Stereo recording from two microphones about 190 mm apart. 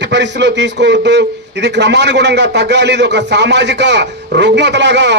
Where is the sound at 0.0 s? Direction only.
65° right (ahead or behind).